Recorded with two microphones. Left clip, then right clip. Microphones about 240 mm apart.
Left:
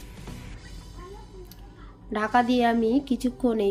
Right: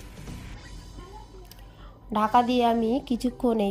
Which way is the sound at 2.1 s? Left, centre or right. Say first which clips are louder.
Right 1 dB; right.